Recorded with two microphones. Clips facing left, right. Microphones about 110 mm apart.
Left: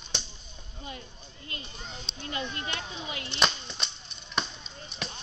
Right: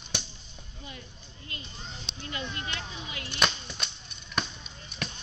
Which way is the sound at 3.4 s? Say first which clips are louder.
Even; centre (ahead or behind).